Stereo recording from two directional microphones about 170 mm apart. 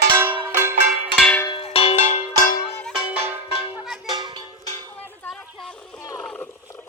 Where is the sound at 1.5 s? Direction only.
35° left (ahead or behind); by 2.6 s 50° left (ahead or behind).